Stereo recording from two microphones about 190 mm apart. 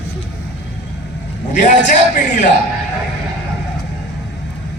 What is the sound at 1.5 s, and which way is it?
Speech, 40° left (ahead or behind).